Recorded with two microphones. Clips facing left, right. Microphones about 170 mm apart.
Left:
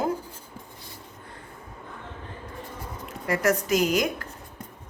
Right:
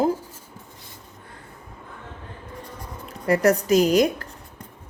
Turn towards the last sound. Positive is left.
turn(degrees=-35)  # may be behind; listen again after turning